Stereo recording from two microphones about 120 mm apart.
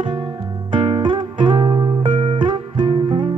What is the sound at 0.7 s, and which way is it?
Music, 40° right (ahead or behind).